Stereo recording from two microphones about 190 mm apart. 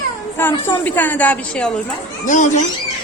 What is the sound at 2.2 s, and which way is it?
Speech, 40° left (ahead or behind).